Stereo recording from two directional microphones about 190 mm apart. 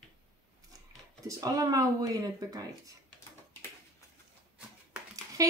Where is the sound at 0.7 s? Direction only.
20° right (ahead or behind).